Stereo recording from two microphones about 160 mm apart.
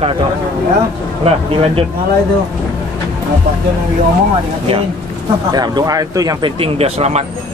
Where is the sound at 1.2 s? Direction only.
40° right (ahead or behind).